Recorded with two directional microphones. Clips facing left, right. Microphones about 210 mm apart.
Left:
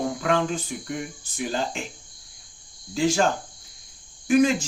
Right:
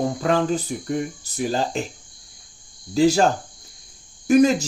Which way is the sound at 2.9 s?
40° right (ahead or behind).